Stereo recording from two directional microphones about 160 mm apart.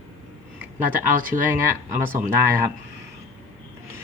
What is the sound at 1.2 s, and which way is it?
Speech, 60° right (ahead or behind).